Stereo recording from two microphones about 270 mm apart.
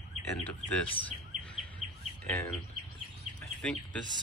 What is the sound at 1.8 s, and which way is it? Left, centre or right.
Bird, right.